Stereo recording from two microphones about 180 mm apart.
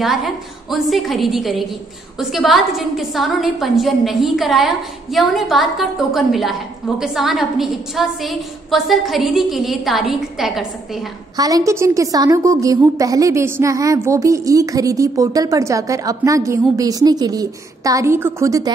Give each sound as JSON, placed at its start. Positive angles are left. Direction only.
{"t": 0.0, "sound": "a woman's voice", "side_deg": 0}
{"t": 11.3, "sound": "a woman's voice", "side_deg": -20}